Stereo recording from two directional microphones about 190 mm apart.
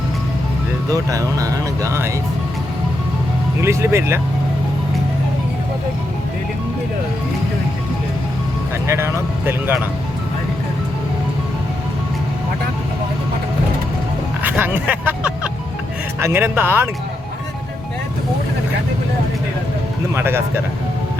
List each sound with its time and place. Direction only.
0.9 s speech: 20° right (ahead or behind)
3.6 s speech: 15° right (ahead or behind)
8.9 s speech: 15° right (ahead or behind)
14.4 s speech: 10° right (ahead or behind)
20.1 s speech: 15° right (ahead or behind)